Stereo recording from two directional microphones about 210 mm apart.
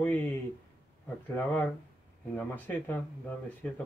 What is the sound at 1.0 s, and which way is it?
Speech, 10° left (ahead or behind).